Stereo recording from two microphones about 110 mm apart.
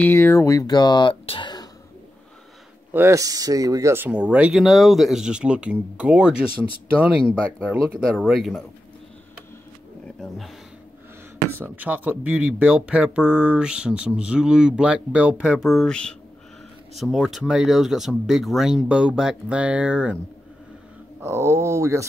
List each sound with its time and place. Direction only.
0.0 s speech: 20° left (ahead or behind); by 1.1 s 40° left (ahead or behind)
1.2 s speech: 60° left (ahead or behind)
2.9 s speech: 20° right (ahead or behind)
3.2 s speech: 35° right (ahead or behind)
3.9 s speech: 15° right (ahead or behind)
8.2 s speech: centre (ahead or behind)
10.2 s speech: centre (ahead or behind)
11.5 s speech: 20° right (ahead or behind)
21.2 s speech: 25° right (ahead or behind)